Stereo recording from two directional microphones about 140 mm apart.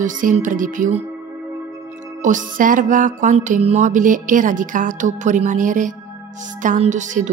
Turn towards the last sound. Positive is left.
turn(degrees=-60)  # may be behind; listen again after turning